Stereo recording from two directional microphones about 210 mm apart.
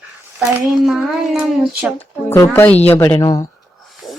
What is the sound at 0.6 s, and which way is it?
Speech, centre (ahead or behind).